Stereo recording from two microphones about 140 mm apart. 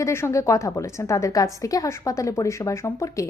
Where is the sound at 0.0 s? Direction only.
20° left (ahead or behind).